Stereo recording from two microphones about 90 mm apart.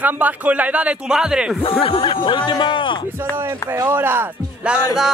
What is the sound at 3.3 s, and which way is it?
Speech, 25° right (ahead or behind).